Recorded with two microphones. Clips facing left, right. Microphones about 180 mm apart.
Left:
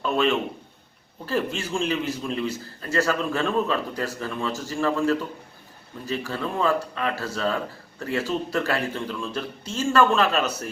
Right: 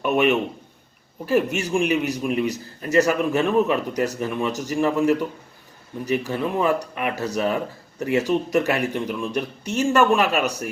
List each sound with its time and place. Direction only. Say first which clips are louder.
0.0 s speech: right 3 dB; 20° right (ahead or behind)